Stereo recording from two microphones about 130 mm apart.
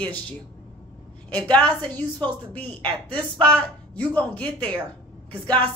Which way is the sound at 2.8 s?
40° right (ahead or behind).